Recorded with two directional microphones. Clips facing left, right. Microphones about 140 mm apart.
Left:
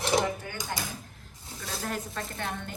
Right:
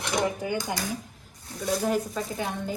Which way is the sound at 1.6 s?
5° right (ahead or behind).